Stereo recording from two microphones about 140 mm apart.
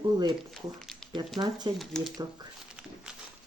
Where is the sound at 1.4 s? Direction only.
30° right (ahead or behind).